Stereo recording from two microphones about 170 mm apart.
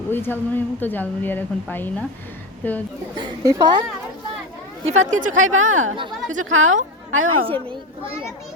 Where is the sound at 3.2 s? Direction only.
20° right (ahead or behind).